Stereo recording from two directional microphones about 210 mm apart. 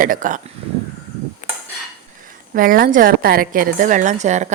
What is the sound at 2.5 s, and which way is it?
A woman's voice, 40° right (ahead or behind).